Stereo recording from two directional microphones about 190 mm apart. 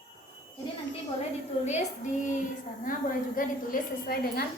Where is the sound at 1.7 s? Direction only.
40° left (ahead or behind).